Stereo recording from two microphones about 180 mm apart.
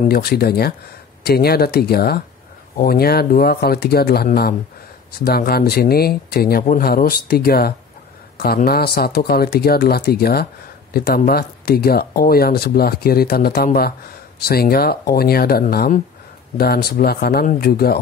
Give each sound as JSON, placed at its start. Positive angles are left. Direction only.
{"t": 0.0, "sound": "speech", "side_deg": 60}